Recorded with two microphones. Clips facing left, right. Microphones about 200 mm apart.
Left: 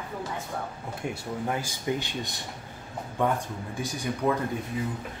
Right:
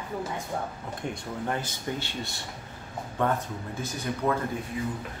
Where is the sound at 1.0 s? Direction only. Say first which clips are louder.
Left 1 dB; 5° left (ahead or behind).